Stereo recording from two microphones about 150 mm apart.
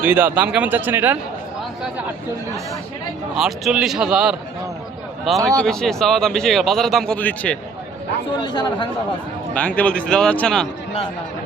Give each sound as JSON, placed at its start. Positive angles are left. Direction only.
{"t": 0.0, "sound": "speech", "side_deg": -10}
{"t": 3.3, "sound": "a man's voice", "side_deg": 0}
{"t": 5.4, "sound": "speech", "side_deg": -20}
{"t": 5.6, "sound": "a man's voice", "side_deg": 5}
{"t": 8.4, "sound": "speech", "side_deg": 30}
{"t": 9.6, "sound": "speech", "side_deg": 10}